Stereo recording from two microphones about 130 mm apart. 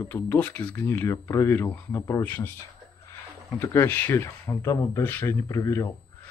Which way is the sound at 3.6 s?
20° left (ahead or behind).